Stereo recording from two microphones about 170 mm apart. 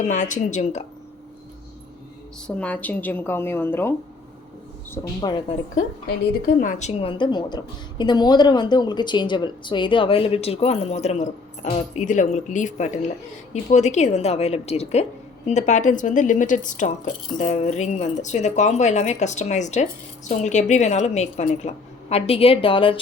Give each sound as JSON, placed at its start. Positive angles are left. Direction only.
{"t": 0.0, "sound": "a woman's voice", "side_deg": 45}
{"t": 2.6, "sound": "a woman's voice", "side_deg": 10}
{"t": 5.2, "sound": "a woman's voice", "side_deg": 25}
{"t": 6.6, "sound": "a woman's voice", "side_deg": 45}